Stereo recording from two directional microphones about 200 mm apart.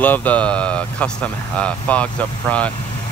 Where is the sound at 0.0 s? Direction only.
10° left (ahead or behind).